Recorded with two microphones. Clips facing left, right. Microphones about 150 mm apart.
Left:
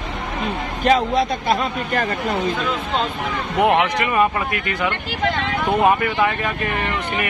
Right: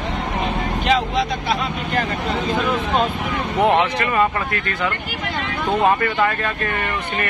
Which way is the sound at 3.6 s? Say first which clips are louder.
Even; 15° left (ahead or behind).